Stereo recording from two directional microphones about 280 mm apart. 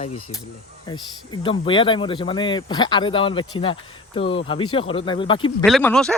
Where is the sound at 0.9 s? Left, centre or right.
Centre.